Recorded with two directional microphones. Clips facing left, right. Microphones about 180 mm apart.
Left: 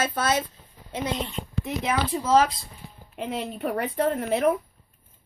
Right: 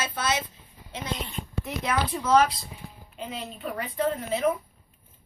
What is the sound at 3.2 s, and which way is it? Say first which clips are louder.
A woman's voice: left 6 dB; 60° left (ahead or behind).